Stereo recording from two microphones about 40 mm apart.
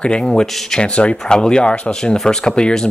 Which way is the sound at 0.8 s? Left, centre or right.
Left.